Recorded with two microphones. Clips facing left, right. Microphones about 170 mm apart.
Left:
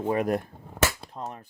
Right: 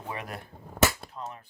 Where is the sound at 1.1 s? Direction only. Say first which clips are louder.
Left 3 dB; 40° left (ahead or behind).